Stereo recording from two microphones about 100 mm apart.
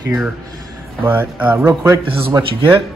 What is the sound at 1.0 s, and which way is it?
Speech, 15° right (ahead or behind).